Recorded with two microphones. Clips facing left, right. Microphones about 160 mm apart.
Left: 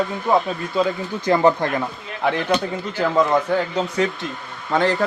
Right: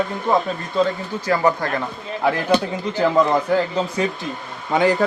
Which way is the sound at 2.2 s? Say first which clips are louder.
Right 1 dB; centre (ahead or behind).